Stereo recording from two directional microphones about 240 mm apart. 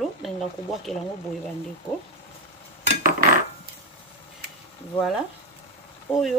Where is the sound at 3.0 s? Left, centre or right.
Right.